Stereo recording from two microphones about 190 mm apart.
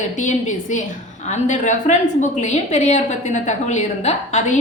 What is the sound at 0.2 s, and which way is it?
A woman's voice, 40° left (ahead or behind).